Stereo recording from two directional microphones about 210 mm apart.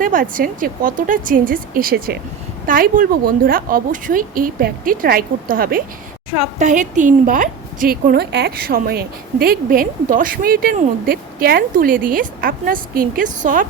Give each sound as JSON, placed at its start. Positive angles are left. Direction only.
{"t": 0.0, "sound": "a woman's voice", "side_deg": -40}